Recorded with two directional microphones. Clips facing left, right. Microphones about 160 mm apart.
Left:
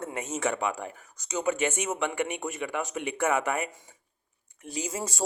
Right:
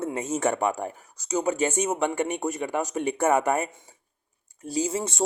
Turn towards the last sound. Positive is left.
turn(degrees=-25)  # may be behind; listen again after turning